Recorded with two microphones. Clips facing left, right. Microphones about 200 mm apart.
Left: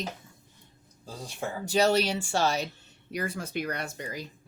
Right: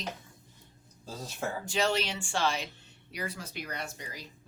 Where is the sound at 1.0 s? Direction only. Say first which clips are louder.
Left 1 dB; 15° left (ahead or behind).